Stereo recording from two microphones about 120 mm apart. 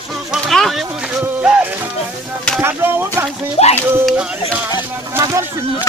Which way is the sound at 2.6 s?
20° right (ahead or behind).